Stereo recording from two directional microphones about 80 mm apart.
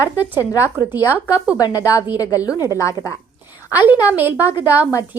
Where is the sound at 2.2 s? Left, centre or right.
Left.